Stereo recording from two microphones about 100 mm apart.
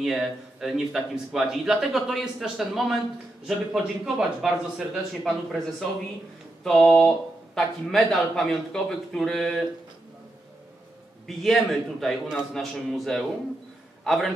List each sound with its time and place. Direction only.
0.0 s a man's voice: 5° right (ahead or behind)
11.2 s a man's voice: centre (ahead or behind)